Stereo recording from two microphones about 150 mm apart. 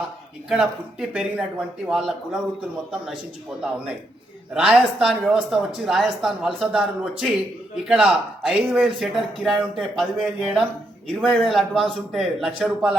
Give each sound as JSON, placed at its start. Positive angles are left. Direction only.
{"t": 0.5, "sound": "speech", "side_deg": -5}
{"t": 4.5, "sound": "speech", "side_deg": -5}